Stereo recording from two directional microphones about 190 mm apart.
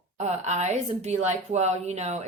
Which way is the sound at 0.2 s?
35° right (ahead or behind).